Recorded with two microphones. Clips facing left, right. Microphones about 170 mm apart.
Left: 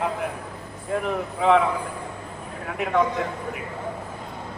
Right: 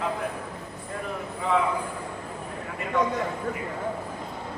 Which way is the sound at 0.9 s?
70° left (ahead or behind).